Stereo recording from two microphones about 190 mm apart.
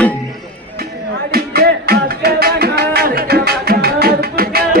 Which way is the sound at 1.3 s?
55° right (ahead or behind).